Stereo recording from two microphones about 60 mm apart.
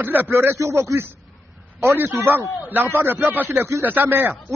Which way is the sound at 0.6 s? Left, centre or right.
Right.